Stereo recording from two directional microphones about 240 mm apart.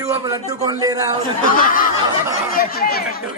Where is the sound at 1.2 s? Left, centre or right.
Left.